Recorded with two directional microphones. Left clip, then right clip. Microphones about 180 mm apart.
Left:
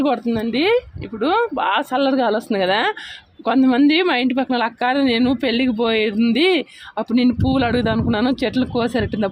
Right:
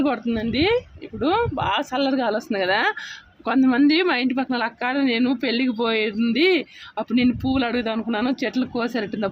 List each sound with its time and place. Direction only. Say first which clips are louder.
0.0 s a woman's voice: left 4 dB; 25° left (ahead or behind)